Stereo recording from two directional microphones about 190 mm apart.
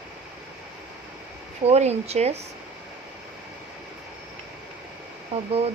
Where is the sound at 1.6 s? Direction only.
35° right (ahead or behind).